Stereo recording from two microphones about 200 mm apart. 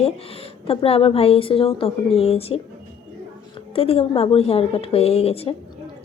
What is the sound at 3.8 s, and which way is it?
Speech, 30° left (ahead or behind).